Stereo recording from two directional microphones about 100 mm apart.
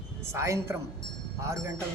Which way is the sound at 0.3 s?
30° right (ahead or behind).